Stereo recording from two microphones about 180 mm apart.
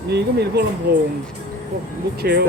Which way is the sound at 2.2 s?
60° right (ahead or behind).